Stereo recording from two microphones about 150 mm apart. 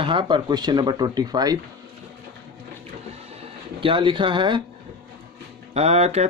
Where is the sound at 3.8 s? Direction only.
35° right (ahead or behind).